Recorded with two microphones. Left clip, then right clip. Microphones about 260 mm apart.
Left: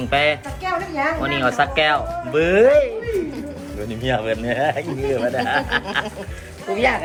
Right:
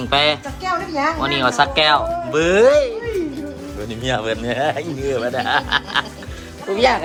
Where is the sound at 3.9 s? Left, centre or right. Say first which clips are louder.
Even; centre.